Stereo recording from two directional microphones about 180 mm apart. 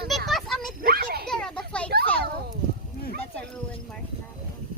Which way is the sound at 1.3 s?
5° left (ahead or behind).